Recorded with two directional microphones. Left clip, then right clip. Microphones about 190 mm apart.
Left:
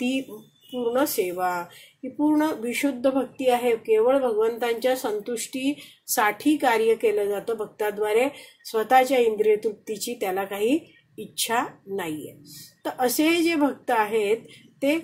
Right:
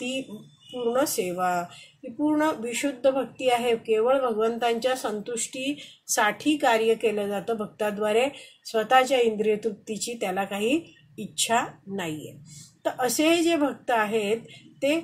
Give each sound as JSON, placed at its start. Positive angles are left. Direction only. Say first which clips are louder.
{"t": 0.9, "sound": "speech", "louder": "left 2 dB", "side_deg": 35}